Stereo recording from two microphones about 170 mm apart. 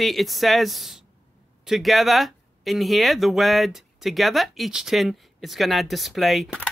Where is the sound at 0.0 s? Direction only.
Centre (ahead or behind).